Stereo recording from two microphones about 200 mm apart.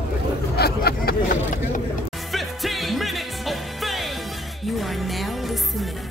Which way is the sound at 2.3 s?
Centre (ahead or behind).